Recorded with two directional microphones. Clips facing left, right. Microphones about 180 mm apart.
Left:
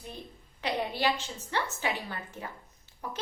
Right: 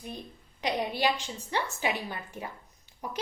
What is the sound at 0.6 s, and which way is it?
A woman's voice, 15° right (ahead or behind).